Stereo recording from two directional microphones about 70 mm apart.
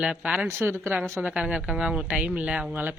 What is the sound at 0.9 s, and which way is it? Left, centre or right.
Speech, right.